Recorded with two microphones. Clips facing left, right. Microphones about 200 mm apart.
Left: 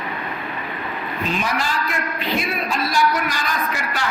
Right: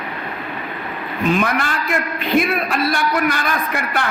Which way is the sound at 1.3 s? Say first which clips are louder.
Right 6 dB; 55° right (ahead or behind).